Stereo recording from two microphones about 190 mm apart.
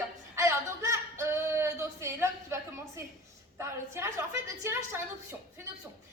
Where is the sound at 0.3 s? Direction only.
15° right (ahead or behind).